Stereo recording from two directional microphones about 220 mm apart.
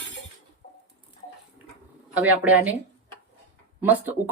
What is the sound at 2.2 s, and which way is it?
Speech, 5° right (ahead or behind).